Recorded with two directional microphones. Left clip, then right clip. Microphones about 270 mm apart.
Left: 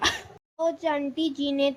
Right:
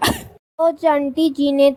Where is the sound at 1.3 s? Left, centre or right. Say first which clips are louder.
Right 10 dB; right.